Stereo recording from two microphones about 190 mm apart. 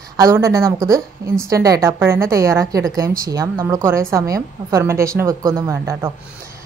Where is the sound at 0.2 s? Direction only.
15° right (ahead or behind).